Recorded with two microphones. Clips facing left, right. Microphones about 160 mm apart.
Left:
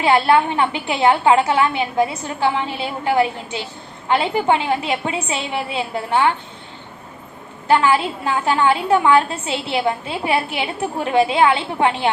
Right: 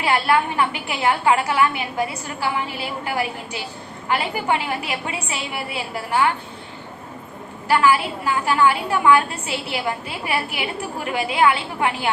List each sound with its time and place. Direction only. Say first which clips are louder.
0.0 s a woman's voice: left 4 dB; 30° left (ahead or behind)
7.7 s a woman's voice: left 2 dB; 25° left (ahead or behind)